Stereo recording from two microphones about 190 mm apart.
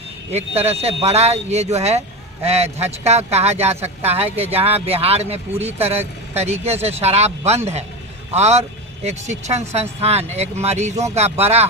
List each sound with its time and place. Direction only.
0.3 s speech: 35° right (ahead or behind)